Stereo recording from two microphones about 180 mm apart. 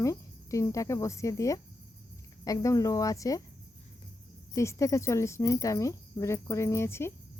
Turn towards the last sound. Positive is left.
turn(degrees=15)  # may be behind; listen again after turning